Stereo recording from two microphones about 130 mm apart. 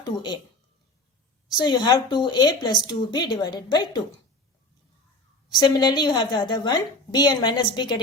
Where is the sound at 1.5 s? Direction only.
35° left (ahead or behind).